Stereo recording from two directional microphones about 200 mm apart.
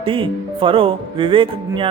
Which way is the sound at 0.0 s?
25° right (ahead or behind).